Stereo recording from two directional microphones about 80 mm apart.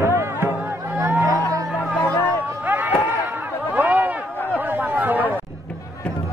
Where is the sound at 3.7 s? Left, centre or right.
Right.